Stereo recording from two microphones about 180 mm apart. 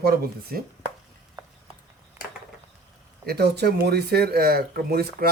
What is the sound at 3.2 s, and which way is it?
Speech, 65° right (ahead or behind).